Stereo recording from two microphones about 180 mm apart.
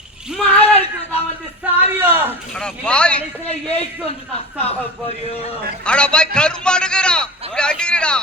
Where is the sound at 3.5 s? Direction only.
35° left (ahead or behind).